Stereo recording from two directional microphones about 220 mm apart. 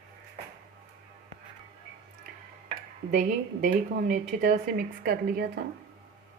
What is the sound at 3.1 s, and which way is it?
A woman's voice, 35° right (ahead or behind).